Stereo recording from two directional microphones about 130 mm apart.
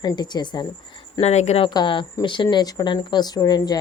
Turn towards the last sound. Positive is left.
turn(degrees=30)  # may be behind; listen again after turning